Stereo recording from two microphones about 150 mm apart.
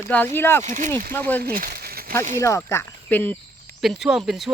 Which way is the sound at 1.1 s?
10° left (ahead or behind).